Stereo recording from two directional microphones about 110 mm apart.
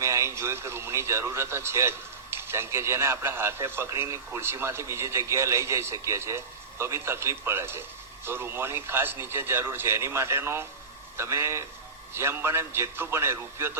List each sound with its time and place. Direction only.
0.0 s speech: 25° right (ahead or behind)